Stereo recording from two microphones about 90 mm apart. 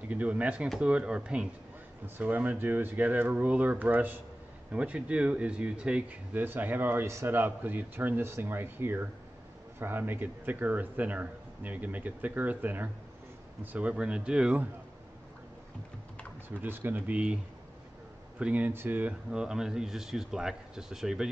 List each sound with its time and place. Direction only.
0.1 s speech: 15° right (ahead or behind)
16.4 s speech: 25° right (ahead or behind)
18.4 s speech: 15° right (ahead or behind)
19.3 s speech: 5° right (ahead or behind)